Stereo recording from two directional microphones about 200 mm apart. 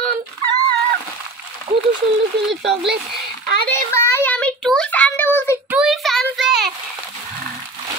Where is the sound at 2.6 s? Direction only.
5° right (ahead or behind).